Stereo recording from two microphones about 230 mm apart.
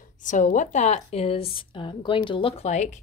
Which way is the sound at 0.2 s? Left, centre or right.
Left.